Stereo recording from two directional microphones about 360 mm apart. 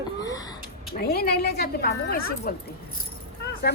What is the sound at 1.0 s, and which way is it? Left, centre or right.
A woman's voice, left.